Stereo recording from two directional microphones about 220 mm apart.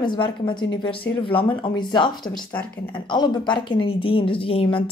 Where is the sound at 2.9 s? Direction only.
20° left (ahead or behind).